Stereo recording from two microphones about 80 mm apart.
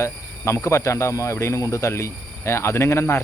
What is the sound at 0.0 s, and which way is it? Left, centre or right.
Speech, left.